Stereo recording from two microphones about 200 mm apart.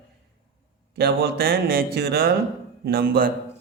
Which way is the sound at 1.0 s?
50° right (ahead or behind).